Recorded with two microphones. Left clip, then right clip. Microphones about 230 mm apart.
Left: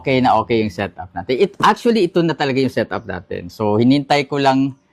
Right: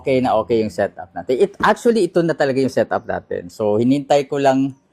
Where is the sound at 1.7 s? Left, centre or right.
Centre.